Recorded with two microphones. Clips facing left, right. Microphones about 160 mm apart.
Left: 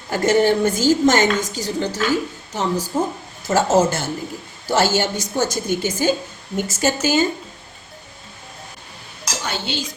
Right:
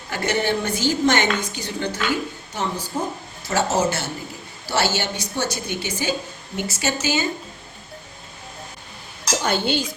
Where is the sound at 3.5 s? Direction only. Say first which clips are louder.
Left 5 dB; 45° left (ahead or behind).